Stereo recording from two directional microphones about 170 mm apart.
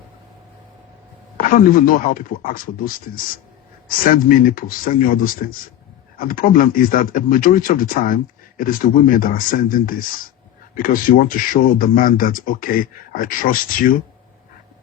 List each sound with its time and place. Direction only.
1.4 s speech: 55° left (ahead or behind)